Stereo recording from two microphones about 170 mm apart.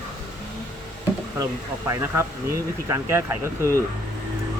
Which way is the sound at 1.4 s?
20° right (ahead or behind).